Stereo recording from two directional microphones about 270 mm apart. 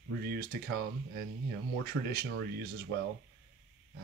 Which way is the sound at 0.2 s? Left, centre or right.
Right.